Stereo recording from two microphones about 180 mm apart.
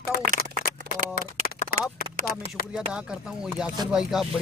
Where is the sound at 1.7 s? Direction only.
55° left (ahead or behind).